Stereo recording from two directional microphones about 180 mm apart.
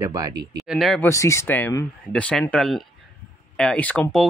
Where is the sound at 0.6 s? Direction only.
Centre (ahead or behind).